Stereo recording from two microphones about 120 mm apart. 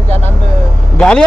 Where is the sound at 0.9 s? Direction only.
10° left (ahead or behind).